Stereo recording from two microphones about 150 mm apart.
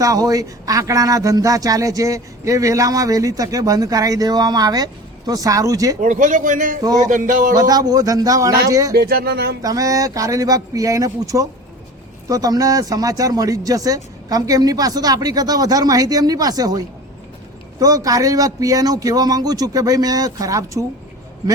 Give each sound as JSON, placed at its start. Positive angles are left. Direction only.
{"t": 0.0, "sound": "speech", "side_deg": -25}
{"t": 6.0, "sound": "a man's voice", "side_deg": -60}
{"t": 7.5, "sound": "speech", "side_deg": -25}
{"t": 9.0, "sound": "speech", "side_deg": -90}
{"t": 9.6, "sound": "speech", "side_deg": -25}